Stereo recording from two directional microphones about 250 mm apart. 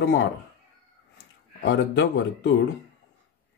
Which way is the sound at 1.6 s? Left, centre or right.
Left.